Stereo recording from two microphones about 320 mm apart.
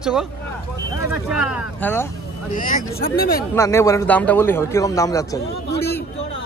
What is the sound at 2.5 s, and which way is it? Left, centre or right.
Speech, left.